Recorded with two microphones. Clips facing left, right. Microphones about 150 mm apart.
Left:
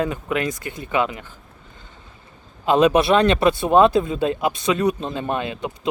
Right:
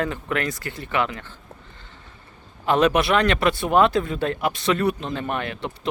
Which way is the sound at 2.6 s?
15° left (ahead or behind).